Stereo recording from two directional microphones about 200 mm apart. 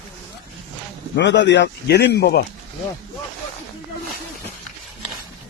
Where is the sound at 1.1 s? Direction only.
60° left (ahead or behind).